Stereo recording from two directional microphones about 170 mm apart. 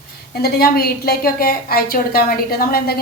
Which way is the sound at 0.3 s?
65° left (ahead or behind).